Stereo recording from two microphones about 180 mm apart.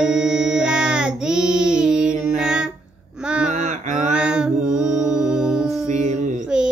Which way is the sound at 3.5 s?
40° right (ahead or behind).